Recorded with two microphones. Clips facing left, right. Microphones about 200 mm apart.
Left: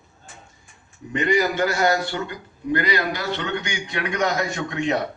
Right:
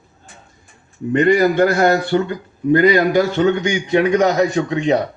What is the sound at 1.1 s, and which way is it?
A man's voice, 55° right (ahead or behind).